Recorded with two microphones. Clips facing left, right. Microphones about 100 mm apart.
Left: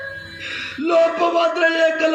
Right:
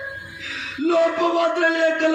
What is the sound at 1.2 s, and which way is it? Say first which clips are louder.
Music: left 2 dB; 60° left (ahead or behind).